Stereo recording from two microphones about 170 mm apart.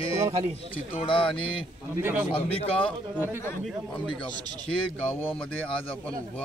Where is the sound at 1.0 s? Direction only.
30° left (ahead or behind).